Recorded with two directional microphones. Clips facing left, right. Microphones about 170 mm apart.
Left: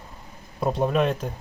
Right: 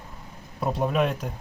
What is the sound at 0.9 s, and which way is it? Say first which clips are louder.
Speech: left 2 dB; 5° right (ahead or behind).